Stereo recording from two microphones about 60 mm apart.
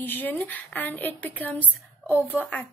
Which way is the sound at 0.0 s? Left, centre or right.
Left.